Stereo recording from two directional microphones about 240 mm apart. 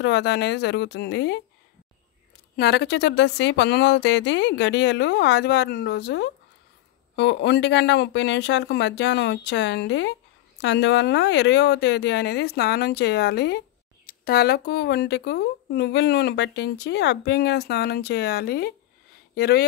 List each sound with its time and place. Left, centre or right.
0.0 s speech: left
2.5 s speech: left